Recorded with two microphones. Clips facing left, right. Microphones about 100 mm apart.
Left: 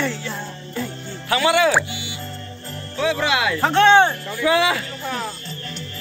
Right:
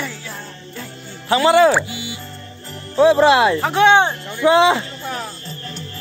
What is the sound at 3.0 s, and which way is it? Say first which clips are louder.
Speech: right 9 dB; 35° right (ahead or behind).